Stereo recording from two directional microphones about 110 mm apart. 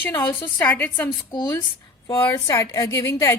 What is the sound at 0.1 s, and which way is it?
A woman's voice, 20° left (ahead or behind).